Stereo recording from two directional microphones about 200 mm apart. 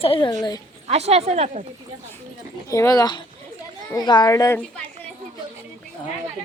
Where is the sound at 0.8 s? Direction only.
30° right (ahead or behind).